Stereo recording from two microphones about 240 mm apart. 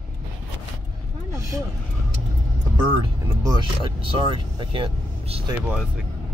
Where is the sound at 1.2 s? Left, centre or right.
Centre.